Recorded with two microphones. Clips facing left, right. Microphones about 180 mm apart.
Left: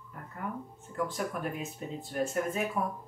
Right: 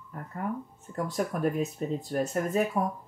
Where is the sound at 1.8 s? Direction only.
40° right (ahead or behind).